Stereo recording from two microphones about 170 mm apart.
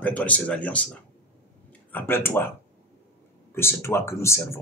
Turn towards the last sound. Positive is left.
turn(degrees=15)  # may be behind; listen again after turning